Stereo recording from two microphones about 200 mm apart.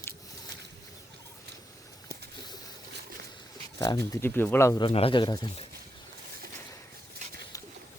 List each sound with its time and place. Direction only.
3.8 s speech: 20° left (ahead or behind)
4.9 s speech: 30° left (ahead or behind)